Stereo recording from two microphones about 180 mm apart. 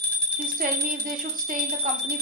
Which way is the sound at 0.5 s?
50° right (ahead or behind).